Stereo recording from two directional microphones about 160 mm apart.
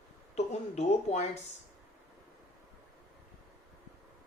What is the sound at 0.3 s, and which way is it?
Speech, 45° left (ahead or behind).